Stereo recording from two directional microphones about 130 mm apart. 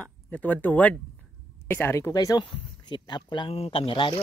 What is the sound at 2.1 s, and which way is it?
Speech, 30° left (ahead or behind).